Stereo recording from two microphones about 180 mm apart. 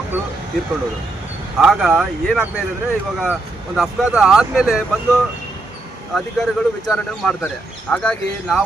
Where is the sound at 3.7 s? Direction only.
5° right (ahead or behind).